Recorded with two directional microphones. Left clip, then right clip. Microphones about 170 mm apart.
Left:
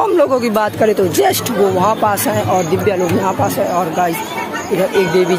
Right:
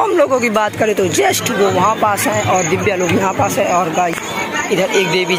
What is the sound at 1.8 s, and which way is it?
Speech, 30° left (ahead or behind).